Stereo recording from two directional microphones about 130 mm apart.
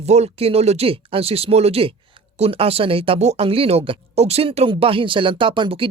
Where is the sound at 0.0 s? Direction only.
55° right (ahead or behind).